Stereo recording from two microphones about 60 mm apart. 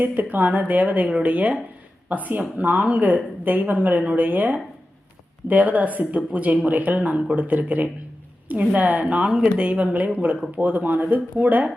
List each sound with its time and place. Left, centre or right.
0.0 s a woman's voice: right